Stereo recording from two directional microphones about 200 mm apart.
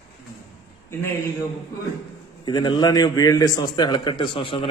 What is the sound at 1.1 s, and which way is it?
Speech, 10° left (ahead or behind).